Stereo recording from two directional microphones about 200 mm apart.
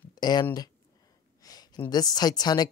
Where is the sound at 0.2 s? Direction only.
20° left (ahead or behind).